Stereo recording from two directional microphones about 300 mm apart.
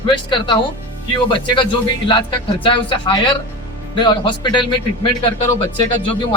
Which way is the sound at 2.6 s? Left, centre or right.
Centre.